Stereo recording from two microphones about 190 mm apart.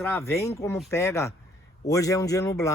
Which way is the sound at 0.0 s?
10° left (ahead or behind).